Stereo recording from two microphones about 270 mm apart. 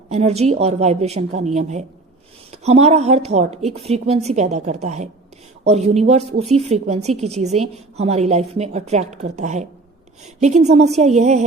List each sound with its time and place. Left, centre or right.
0.1 s a woman's voice: right